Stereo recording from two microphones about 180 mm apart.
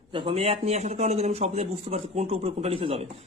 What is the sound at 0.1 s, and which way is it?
A man's voice, 30° right (ahead or behind).